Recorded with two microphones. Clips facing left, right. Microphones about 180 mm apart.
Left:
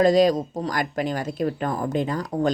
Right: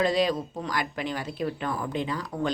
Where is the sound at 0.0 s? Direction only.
40° left (ahead or behind).